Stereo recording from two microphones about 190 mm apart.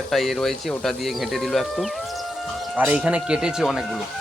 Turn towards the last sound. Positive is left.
turn(degrees=-5)  # may be behind; listen again after turning